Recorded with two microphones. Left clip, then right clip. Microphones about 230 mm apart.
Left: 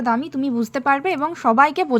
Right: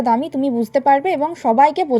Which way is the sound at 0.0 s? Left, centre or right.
Centre.